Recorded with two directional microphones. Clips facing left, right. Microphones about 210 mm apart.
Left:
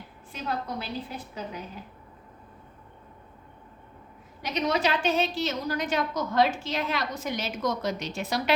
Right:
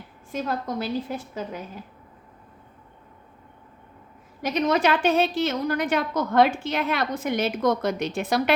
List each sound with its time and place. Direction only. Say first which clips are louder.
0.3 s a woman's voice: right 5 dB; 45° right (ahead or behind)
4.4 s a woman's voice: right 5 dB; 50° right (ahead or behind)